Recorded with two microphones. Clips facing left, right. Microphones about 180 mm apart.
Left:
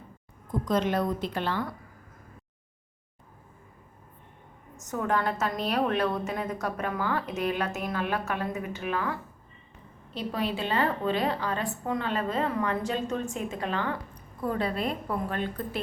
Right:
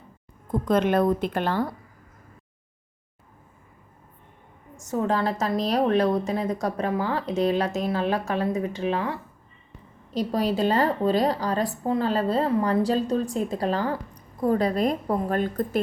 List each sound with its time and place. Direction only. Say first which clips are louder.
0.6 s a woman's voice: right 5 dB; 55° right (ahead or behind)
4.9 s a woman's voice: right 4 dB; 30° right (ahead or behind)
10.1 s a woman's voice: right 6 dB; 40° right (ahead or behind)